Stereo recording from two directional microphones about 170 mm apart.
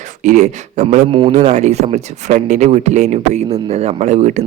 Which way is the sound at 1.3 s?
40° right (ahead or behind).